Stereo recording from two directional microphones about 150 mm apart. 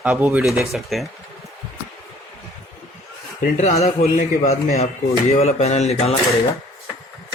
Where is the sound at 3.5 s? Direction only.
50° left (ahead or behind).